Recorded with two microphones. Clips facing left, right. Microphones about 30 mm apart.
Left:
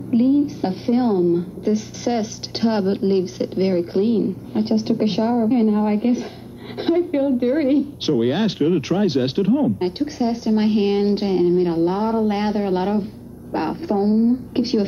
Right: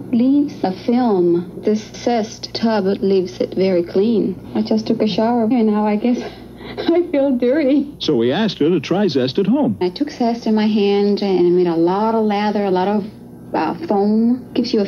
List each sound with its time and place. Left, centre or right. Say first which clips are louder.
0.1 s a woman's voice: right 2 dB; centre